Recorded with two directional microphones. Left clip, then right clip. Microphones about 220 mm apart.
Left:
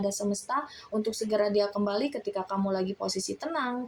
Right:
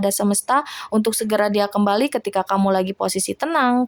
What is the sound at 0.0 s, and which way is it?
Speech, 40° right (ahead or behind).